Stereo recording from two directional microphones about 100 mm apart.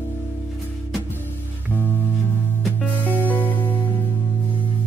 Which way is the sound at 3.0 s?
15° right (ahead or behind).